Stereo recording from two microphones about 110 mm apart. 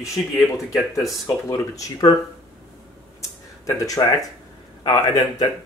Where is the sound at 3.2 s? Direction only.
30° left (ahead or behind).